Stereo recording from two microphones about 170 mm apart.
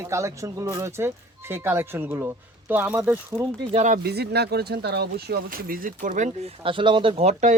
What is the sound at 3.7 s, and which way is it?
Speech, 45° right (ahead or behind).